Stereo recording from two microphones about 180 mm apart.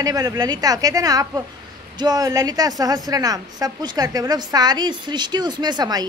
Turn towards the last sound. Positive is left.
turn(degrees=-20)  # may be behind; listen again after turning